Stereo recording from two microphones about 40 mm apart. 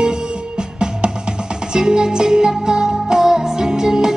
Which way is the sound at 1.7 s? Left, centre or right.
Centre.